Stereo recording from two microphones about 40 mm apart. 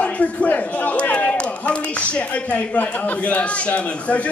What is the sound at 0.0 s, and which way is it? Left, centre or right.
Speech, left.